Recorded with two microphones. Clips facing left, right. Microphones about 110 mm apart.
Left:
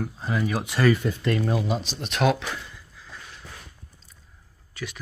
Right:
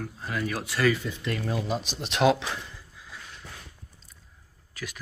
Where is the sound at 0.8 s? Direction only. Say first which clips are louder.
Left 4 dB; 55° left (ahead or behind).